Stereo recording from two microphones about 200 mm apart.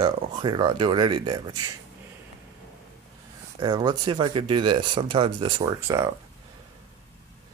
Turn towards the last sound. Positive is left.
turn(degrees=-15)  # may be behind; listen again after turning